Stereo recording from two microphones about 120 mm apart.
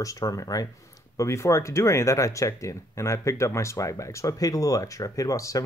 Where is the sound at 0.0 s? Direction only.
30° left (ahead or behind).